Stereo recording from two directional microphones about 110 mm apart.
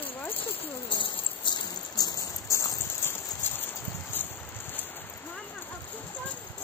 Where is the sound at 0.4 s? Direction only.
50° left (ahead or behind); by 4.3 s 20° left (ahead or behind).